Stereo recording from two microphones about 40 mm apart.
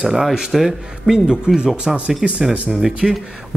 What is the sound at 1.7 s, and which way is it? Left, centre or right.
Speech, right.